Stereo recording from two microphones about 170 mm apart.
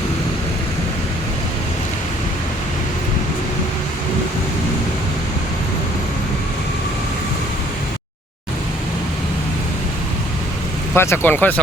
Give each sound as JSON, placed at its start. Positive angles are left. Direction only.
{"t": 10.9, "sound": "speech", "side_deg": 15}